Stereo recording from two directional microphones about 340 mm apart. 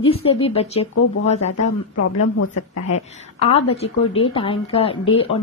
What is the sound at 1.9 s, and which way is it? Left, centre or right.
Speech, left.